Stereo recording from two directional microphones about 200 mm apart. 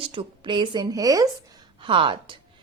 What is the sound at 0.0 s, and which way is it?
A woman's voice, 25° right (ahead or behind).